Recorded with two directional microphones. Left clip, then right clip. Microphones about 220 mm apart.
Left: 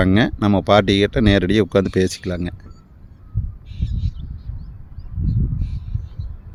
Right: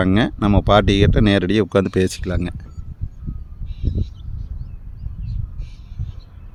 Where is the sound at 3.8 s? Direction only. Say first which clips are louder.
Right 4 dB; 45° left (ahead or behind).